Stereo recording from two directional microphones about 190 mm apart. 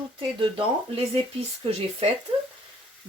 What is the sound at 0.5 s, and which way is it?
Speech, 30° right (ahead or behind).